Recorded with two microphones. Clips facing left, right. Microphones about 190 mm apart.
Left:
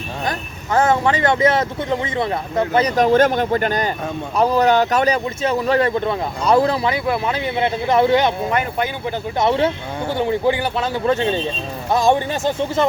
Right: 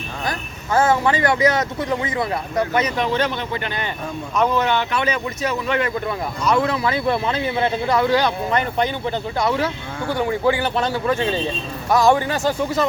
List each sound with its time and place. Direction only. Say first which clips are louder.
0.3 s speech: even; 20° left (ahead or behind)
7.1 s speech: even; 10° left (ahead or behind)
8.4 s speech: even; 10° left (ahead or behind)
9.4 s speech: left 5 dB; 25° left (ahead or behind)